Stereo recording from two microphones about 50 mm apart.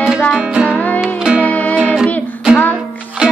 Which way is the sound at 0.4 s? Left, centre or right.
Right.